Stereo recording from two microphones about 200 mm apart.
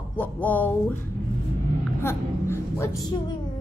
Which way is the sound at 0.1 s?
10° left (ahead or behind).